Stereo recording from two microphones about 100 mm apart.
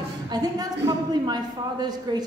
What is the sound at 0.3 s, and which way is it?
A woman's voice, 40° right (ahead or behind).